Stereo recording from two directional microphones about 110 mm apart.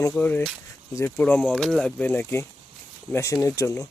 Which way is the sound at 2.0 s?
20° left (ahead or behind).